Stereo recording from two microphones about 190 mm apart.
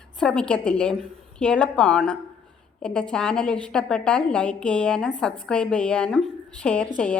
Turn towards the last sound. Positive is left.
turn(degrees=5)  # may be behind; listen again after turning